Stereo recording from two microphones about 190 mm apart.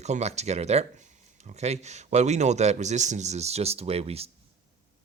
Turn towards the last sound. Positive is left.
turn(degrees=-30)  # may be behind; listen again after turning